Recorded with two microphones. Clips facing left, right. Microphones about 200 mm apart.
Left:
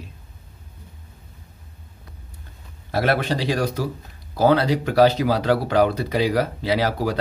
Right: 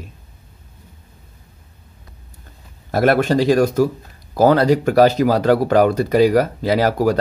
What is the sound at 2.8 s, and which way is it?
Speech, 45° right (ahead or behind).